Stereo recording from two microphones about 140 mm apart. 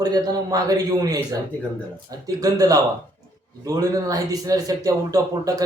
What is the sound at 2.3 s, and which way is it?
Speech, 25° right (ahead or behind).